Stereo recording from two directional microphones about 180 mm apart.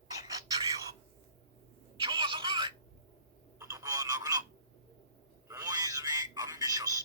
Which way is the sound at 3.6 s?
20° right (ahead or behind).